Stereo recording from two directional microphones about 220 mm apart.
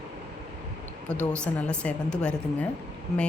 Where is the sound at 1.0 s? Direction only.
5° left (ahead or behind).